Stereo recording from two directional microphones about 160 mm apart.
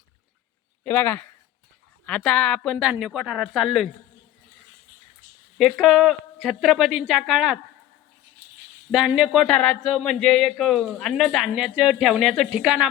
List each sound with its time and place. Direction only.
0.9 s speech: 15° left (ahead or behind)
2.7 s speech: 5° right (ahead or behind)
5.5 s speech: centre (ahead or behind)
8.9 s speech: 5° right (ahead or behind)